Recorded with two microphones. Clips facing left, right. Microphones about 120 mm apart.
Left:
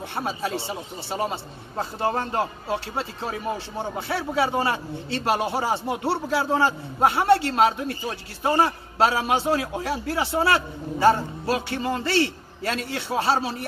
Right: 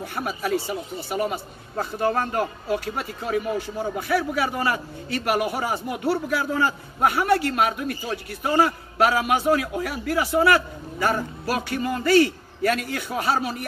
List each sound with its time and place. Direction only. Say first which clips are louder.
0.1 s a man's voice: right 2 dB; 25° left (ahead or behind)